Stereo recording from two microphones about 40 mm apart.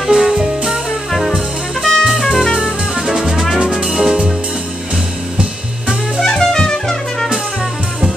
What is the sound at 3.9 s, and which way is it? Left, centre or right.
Music, centre.